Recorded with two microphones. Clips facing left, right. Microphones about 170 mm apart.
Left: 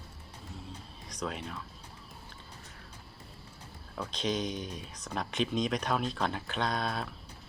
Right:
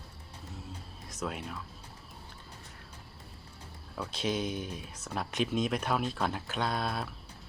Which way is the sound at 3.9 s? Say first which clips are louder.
Even; 5° right (ahead or behind).